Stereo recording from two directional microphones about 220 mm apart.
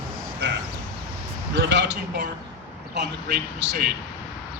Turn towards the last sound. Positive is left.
turn(degrees=-45)  # may be behind; listen again after turning